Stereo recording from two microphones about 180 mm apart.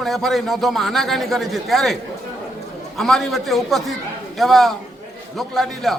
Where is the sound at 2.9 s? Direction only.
Centre (ahead or behind).